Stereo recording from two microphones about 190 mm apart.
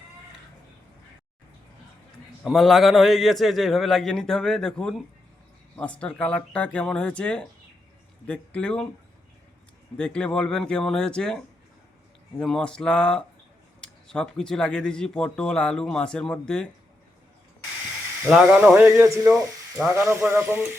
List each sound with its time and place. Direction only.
2.4 s speech: centre (ahead or behind)
10.0 s speech: 5° left (ahead or behind)
18.3 s speech: 5° right (ahead or behind)